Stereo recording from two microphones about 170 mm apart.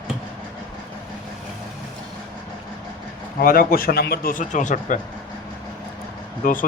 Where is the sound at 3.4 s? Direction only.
60° left (ahead or behind).